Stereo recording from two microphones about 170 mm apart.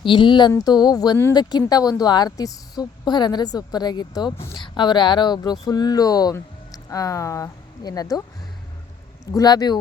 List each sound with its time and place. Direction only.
0.0 s speech: 30° left (ahead or behind)
9.2 s speech: 20° left (ahead or behind)